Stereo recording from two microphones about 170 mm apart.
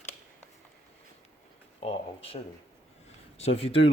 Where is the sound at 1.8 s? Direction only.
35° left (ahead or behind).